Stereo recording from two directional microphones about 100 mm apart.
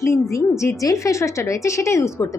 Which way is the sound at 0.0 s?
30° left (ahead or behind).